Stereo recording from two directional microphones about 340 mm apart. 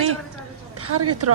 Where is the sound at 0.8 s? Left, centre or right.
Right.